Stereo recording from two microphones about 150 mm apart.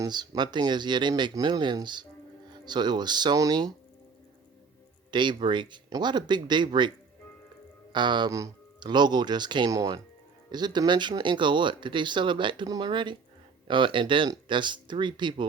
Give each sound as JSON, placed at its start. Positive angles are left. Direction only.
{"t": 0.0, "sound": "speech", "side_deg": -30}
{"t": 5.1, "sound": "speech", "side_deg": -30}
{"t": 7.9, "sound": "speech", "side_deg": -30}